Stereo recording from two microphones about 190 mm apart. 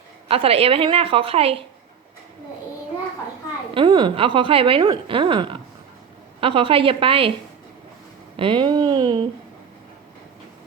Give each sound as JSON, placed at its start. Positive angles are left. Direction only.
{"t": 0.3, "sound": "a woman's voice", "side_deg": -30}
{"t": 3.8, "sound": "a woman's voice", "side_deg": -25}
{"t": 8.4, "sound": "a woman's voice", "side_deg": -25}